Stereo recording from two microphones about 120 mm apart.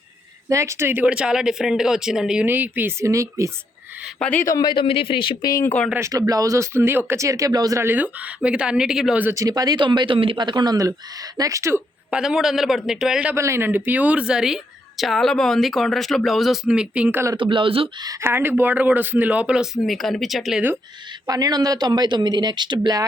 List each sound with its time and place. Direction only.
0.4 s speech: 25° right (ahead or behind)
4.2 s speech: 10° left (ahead or behind)
4.4 s a man's voice: 30° left (ahead or behind)
4.7 s speech: 45° left (ahead or behind)
5.5 s speech: 25° left (ahead or behind)
5.9 s speech: 25° right (ahead or behind); by 9.2 s 5° right (ahead or behind)
9.2 s speech: 25° right (ahead or behind)
12.1 s a woman's voice: 5° right (ahead or behind)
13.3 s a woman's voice: 25° right (ahead or behind)
17.3 s speech: 45° right (ahead or behind)
18.2 s speech: 20° right (ahead or behind); by 20.6 s centre (ahead or behind)
21.2 s speech: 30° right (ahead or behind)